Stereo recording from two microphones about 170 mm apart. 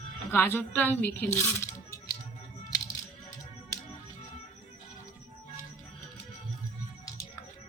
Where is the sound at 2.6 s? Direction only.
20° left (ahead or behind).